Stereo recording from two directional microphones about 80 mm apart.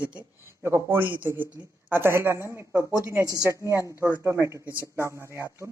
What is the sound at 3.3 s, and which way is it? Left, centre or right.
Speech, right.